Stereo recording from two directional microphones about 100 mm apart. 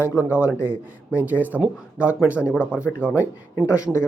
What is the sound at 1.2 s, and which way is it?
Speech, 20° left (ahead or behind).